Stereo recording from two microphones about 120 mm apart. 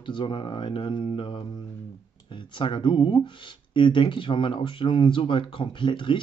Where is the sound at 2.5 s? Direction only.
45° left (ahead or behind).